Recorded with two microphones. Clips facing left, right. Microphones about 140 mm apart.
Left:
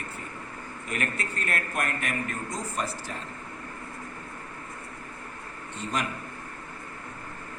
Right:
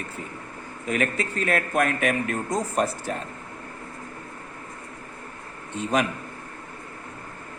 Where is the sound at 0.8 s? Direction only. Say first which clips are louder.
Right 7 dB; 90° right.